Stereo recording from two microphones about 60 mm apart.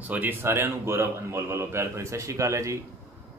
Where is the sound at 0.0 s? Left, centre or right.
Right.